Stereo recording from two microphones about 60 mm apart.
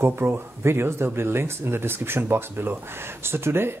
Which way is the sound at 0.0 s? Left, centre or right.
Right.